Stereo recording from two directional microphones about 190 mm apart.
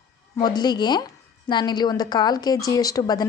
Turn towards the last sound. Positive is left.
turn(degrees=20)  # may be behind; listen again after turning